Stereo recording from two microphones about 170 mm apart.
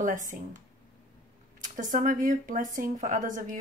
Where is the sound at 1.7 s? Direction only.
50° right (ahead or behind).